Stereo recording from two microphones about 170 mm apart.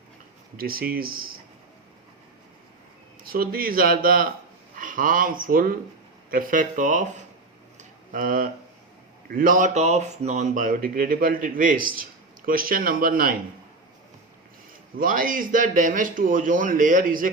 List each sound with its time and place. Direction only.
0.5 s speech: 60° right (ahead or behind)
3.2 s speech: 60° right (ahead or behind)
7.8 s a sound: 55° right (ahead or behind)
9.3 s speech: 55° right (ahead or behind)
14.9 s speech: 55° right (ahead or behind)